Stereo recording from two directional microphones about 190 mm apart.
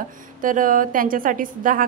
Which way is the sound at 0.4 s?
45° right (ahead or behind).